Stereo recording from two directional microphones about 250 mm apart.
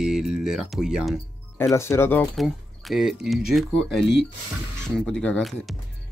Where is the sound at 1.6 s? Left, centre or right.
Centre.